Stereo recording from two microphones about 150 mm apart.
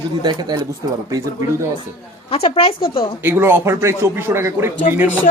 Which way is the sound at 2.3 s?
40° left (ahead or behind).